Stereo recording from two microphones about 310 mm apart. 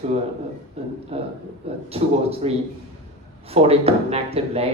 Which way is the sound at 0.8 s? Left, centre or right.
Centre.